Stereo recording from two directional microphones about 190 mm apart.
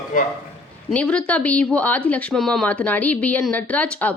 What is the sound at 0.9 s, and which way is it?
Speech, 5° left (ahead or behind).